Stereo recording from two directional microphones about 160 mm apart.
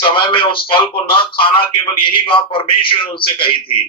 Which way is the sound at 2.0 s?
30° left (ahead or behind).